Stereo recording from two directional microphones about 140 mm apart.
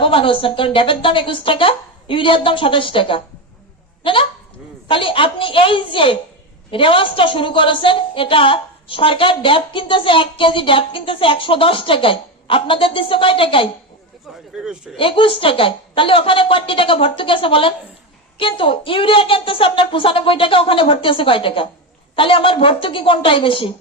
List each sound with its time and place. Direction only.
0.0 s a woman's voice: 40° left (ahead or behind)
14.5 s speech: 5° right (ahead or behind)
14.9 s a woman's voice: 40° left (ahead or behind)